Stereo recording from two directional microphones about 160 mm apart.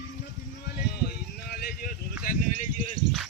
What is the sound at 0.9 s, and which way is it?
Speech, 75° left (ahead or behind).